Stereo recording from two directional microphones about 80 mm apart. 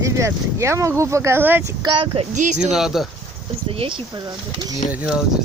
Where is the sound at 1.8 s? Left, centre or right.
Right.